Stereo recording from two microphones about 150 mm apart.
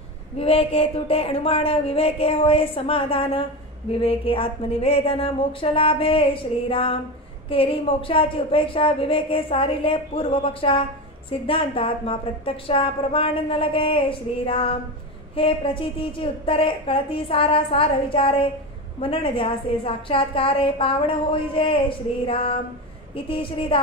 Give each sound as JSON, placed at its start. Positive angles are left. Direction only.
{"t": 0.4, "sound": "a woman's voice", "side_deg": 40}